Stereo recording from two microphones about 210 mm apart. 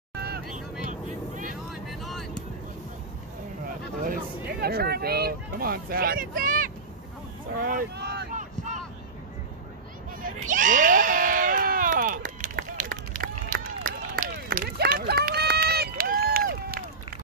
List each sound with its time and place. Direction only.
0.1 s vehicle: 50° right (ahead or behind)
1.7 s vehicle: centre (ahead or behind)
3.6 s speech: 45° right (ahead or behind)
8.3 s a sound: 35° right (ahead or behind)
10.2 s screaming: 40° right (ahead or behind)
13.8 s run: 40° right (ahead or behind)